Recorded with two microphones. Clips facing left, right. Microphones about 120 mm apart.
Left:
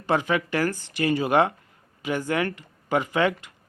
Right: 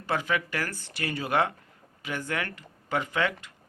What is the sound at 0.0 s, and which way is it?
Speech, 20° left (ahead or behind).